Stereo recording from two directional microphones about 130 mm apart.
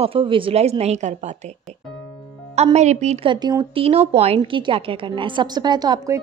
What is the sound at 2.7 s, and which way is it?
Speech, 60° right (ahead or behind).